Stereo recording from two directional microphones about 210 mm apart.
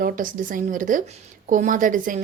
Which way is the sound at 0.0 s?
40° right (ahead or behind).